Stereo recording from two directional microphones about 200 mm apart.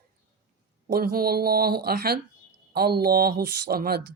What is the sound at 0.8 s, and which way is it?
Speech, 50° right (ahead or behind).